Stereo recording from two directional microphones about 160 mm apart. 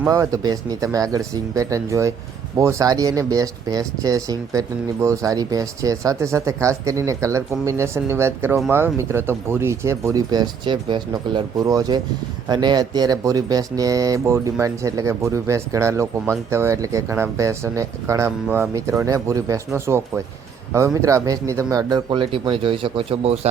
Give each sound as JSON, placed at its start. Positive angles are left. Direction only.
{"t": 0.1, "sound": "speech", "side_deg": -20}